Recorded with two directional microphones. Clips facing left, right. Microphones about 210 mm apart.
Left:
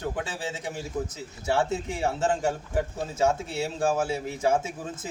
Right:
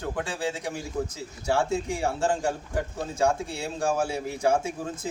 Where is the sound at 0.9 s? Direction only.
5° left (ahead or behind).